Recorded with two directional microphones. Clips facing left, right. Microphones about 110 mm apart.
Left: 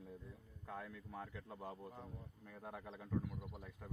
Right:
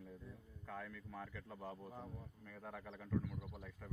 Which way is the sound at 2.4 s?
15° left (ahead or behind).